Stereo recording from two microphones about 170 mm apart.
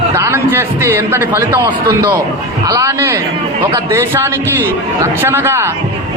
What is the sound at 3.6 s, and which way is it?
Speech, 25° right (ahead or behind).